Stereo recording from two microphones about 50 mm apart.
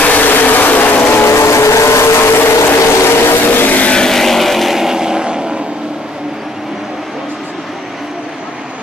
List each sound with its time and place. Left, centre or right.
0.0 s vehicle: left
1.2 s vehicle: left
2.1 s a sound: left
3.1 s vehicle: left
3.9 s vehicle: centre